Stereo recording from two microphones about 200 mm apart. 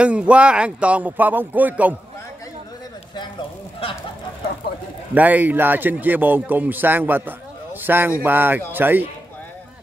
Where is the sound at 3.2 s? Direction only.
25° left (ahead or behind).